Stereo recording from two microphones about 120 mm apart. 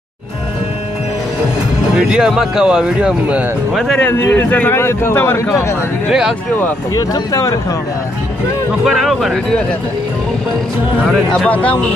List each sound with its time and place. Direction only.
2.0 s speech: 5° right (ahead or behind)
4.0 s a man's voice: 15° left (ahead or behind)
6.0 s speech: 5° right (ahead or behind)
7.0 s a man's voice: 30° left (ahead or behind)
8.8 s speech: centre (ahead or behind)
11.3 s speech: 10° left (ahead or behind)